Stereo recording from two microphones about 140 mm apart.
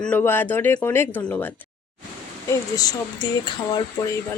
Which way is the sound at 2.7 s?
25° left (ahead or behind).